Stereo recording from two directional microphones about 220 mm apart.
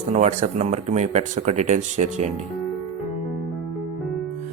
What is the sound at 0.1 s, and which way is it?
Speech, 35° right (ahead or behind).